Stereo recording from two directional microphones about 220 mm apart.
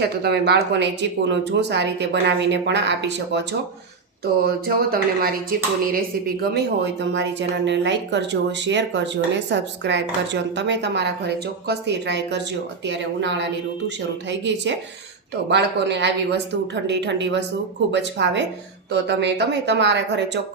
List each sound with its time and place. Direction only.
0.0 s speech: 45° right (ahead or behind)
4.4 s speech: 45° right (ahead or behind)